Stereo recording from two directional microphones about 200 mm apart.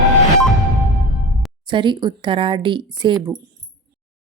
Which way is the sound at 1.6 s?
25° right (ahead or behind).